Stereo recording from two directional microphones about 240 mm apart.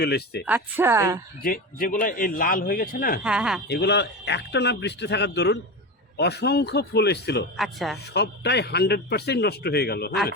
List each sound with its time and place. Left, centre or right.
0.0 s speech: left
0.4 s a woman's voice: centre
1.4 s speech: left
3.2 s speech: centre
3.7 s speech: left
7.5 s speech: centre
8.1 s speech: left